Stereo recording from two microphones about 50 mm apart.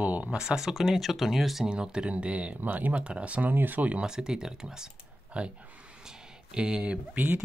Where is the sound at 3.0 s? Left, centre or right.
Right.